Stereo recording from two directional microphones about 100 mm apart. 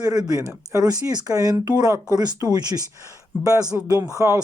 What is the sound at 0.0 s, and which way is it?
Speech, 40° right (ahead or behind).